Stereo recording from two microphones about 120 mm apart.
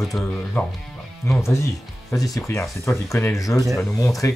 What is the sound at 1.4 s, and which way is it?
Speech, 25° left (ahead or behind).